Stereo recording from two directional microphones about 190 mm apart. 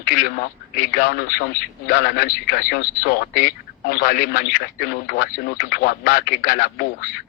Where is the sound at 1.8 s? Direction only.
50° left (ahead or behind).